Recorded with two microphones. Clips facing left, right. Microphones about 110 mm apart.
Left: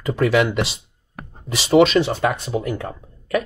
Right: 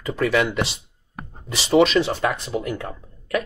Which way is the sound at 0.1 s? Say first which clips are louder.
Left 3 dB; 25° left (ahead or behind).